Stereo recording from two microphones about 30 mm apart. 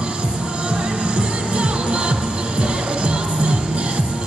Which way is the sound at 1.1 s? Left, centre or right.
Right.